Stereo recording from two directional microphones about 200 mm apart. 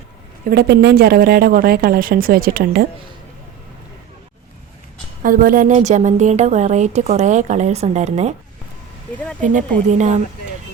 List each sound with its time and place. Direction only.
0.4 s a woman's voice: 55° right (ahead or behind)
5.2 s speech: 45° right (ahead or behind)
9.4 s speech: 40° right (ahead or behind)